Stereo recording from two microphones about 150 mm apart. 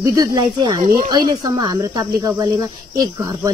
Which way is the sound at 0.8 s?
60° right (ahead or behind).